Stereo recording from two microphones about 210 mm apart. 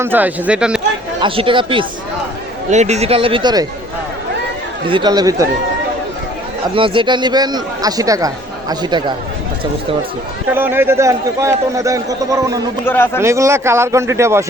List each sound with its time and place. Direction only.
0.0 s speech: 10° right (ahead or behind)
1.2 s a man's voice: 25° right (ahead or behind)
4.9 s a man's voice: 20° right (ahead or behind)
6.7 s a man's voice: 25° right (ahead or behind)
10.5 s speech: 10° right (ahead or behind)
12.8 s a man's voice: 10° left (ahead or behind)
13.1 s speech: 15° right (ahead or behind)